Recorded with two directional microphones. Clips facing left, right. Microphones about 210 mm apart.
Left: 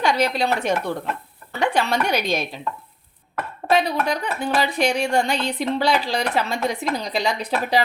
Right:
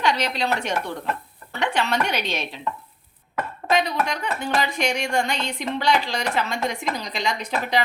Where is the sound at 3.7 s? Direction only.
35° left (ahead or behind).